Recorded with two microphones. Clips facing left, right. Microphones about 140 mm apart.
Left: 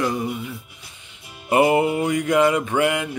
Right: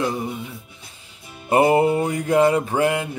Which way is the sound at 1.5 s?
35° right (ahead or behind).